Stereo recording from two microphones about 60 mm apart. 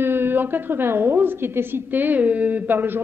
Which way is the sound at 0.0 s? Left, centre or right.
Right.